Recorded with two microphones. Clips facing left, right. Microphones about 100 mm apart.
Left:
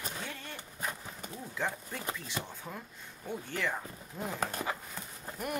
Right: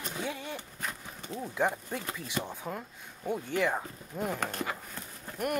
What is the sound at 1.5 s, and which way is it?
Speech, 20° right (ahead or behind).